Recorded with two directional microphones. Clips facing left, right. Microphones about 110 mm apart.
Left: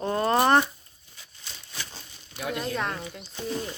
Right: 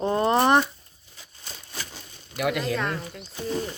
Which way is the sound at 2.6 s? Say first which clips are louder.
Right 3 dB; centre (ahead or behind).